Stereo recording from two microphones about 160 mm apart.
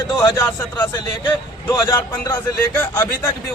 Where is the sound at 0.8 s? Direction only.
25° left (ahead or behind).